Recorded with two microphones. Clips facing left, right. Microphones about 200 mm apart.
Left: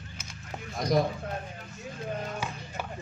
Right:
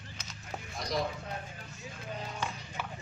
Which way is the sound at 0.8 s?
50° left (ahead or behind).